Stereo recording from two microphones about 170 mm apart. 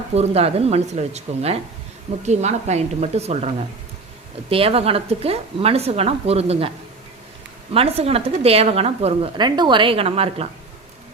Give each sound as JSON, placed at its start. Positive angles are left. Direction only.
{"t": 0.1, "sound": "speech", "side_deg": -40}